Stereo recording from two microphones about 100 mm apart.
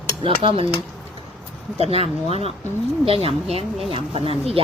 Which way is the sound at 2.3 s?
80° right.